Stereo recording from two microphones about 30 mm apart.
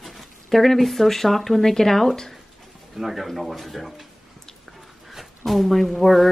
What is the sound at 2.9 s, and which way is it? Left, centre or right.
Speech, centre.